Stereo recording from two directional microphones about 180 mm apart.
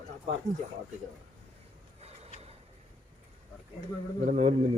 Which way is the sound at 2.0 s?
35° right (ahead or behind).